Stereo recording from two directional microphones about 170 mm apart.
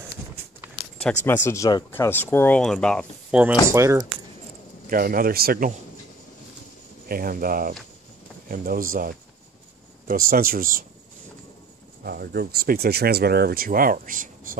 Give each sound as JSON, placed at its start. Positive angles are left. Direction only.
{"t": 1.2, "sound": "speech", "side_deg": 15}
{"t": 3.3, "sound": "speech", "side_deg": -5}
{"t": 3.7, "sound": "speech", "side_deg": -15}
{"t": 4.8, "sound": "speech", "side_deg": -55}
{"t": 7.1, "sound": "speech", "side_deg": -60}
{"t": 12.0, "sound": "speech", "side_deg": -65}